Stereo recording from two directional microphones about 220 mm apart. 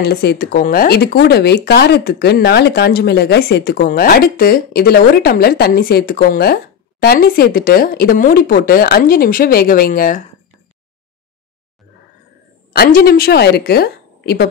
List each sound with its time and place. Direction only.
0.0 s speech: 45° left (ahead or behind)
12.7 s speech: 45° left (ahead or behind)